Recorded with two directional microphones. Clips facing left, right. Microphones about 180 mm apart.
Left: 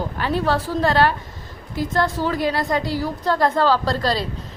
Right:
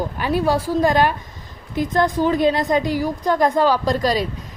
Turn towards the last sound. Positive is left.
turn(degrees=-15)  # may be behind; listen again after turning